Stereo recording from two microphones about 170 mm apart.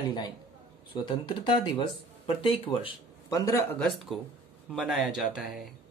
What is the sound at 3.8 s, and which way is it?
Speech, centre (ahead or behind).